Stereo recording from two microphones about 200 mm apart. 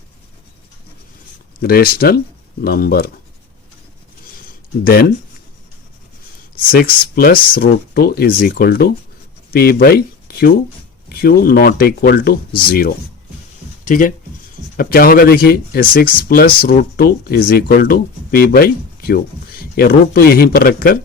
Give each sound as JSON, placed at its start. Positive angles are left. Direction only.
{"t": 1.6, "sound": "speech", "side_deg": 50}
{"t": 4.8, "sound": "speech", "side_deg": 50}
{"t": 6.7, "sound": "speech", "side_deg": 50}